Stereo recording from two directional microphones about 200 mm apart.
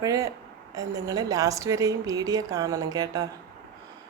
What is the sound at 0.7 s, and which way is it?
A woman's voice, 20° right (ahead or behind).